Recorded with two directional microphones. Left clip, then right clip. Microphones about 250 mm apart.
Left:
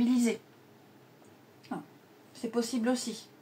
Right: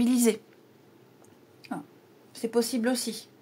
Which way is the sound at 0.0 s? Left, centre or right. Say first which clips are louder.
Right 4 dB; right.